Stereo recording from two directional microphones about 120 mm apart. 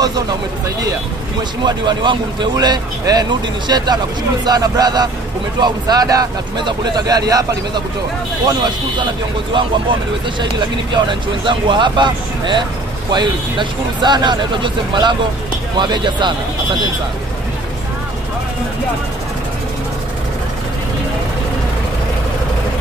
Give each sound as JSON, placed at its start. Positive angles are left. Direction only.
{"t": 1.6, "sound": "a man's voice", "side_deg": -40}
{"t": 9.5, "sound": "a man's voice", "side_deg": -40}